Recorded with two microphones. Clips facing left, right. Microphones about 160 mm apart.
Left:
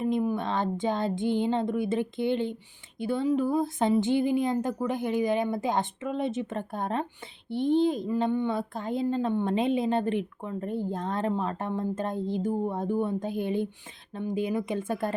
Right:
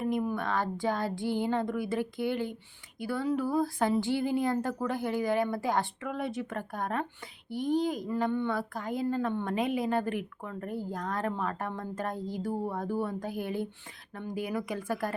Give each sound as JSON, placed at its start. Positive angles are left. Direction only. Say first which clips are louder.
{"t": 0.0, "sound": "a woman's voice", "louder": "left 3 dB", "side_deg": 20}